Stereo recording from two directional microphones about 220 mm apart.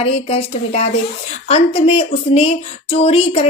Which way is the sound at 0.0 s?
25° left (ahead or behind).